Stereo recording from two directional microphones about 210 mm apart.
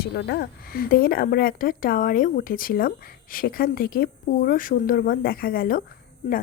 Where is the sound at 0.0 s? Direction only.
50° left (ahead or behind).